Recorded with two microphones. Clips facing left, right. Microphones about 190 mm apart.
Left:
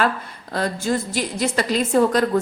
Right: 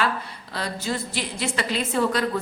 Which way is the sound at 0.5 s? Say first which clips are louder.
Left 6 dB; 50° left (ahead or behind).